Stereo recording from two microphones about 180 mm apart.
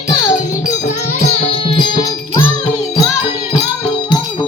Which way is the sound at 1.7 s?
25° left (ahead or behind).